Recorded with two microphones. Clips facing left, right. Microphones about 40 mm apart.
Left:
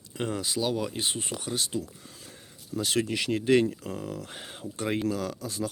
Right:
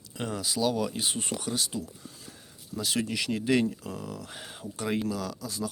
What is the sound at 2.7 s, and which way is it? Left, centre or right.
Speech, left.